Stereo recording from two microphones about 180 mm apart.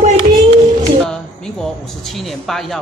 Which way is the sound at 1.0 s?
5° left (ahead or behind).